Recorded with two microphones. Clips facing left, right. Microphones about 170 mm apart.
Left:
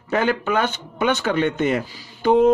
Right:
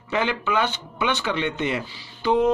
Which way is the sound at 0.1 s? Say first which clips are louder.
Left 4 dB; 45° left (ahead or behind).